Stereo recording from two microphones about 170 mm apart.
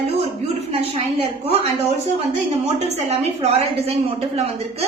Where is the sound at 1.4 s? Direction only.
35° right (ahead or behind).